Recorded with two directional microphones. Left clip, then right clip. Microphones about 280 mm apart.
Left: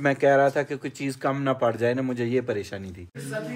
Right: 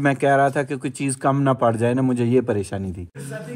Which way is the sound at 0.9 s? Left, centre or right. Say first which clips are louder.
Right 7 dB; right.